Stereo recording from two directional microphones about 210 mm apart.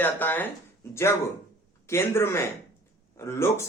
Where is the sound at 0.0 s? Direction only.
10° left (ahead or behind).